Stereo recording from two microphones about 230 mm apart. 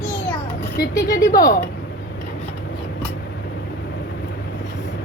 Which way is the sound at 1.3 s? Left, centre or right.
Left.